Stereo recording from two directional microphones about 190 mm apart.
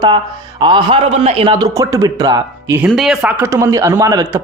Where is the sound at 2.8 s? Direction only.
Centre (ahead or behind); by 4.4 s 20° right (ahead or behind).